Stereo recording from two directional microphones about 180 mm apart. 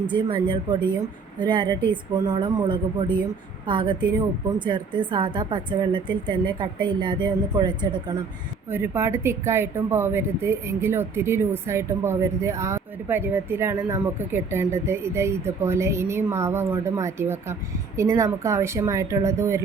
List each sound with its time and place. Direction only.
0.0 s a woman's voice: 25° right (ahead or behind)
8.7 s speech: 15° right (ahead or behind)